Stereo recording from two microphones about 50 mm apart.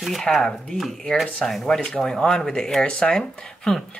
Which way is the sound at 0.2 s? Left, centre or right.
Centre.